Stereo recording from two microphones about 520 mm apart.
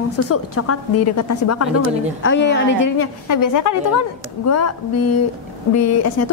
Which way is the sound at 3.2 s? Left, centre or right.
Left.